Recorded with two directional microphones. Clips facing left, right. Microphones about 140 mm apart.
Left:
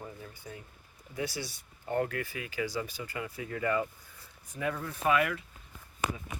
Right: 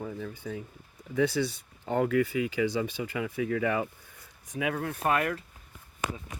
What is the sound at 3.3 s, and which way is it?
Speech, 90° right.